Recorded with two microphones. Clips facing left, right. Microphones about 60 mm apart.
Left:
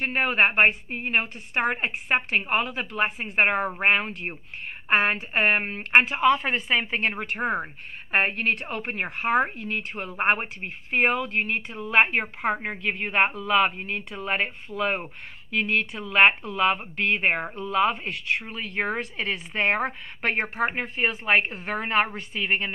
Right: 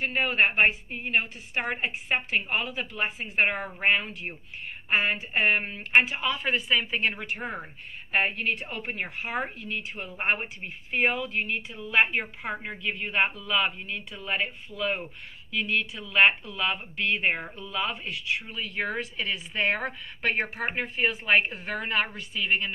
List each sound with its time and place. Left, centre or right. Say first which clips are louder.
0.0 s a woman's voice: left 2 dB; left
1.8 s a woman's voice: left 3 dB; left
6.4 s a woman's voice: left 1 dB; left
7.2 s a woman's voice: left 7 dB; left
8.1 s a woman's voice: left 3 dB; left
8.5 s a woman's voice: left 4 dB; left
8.9 s a woman's voice: left 9 dB; left